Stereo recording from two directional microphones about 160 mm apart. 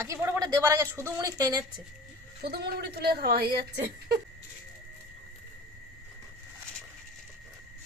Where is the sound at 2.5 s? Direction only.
70° right (ahead or behind).